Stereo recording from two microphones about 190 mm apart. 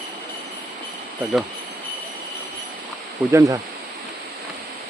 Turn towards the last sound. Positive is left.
turn(degrees=-20)  # may be behind; listen again after turning